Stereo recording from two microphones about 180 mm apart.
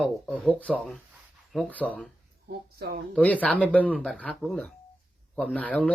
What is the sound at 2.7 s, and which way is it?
Speech, 65° right (ahead or behind).